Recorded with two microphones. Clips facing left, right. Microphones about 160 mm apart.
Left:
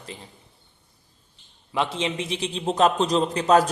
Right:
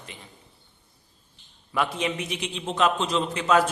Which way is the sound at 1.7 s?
25° left (ahead or behind).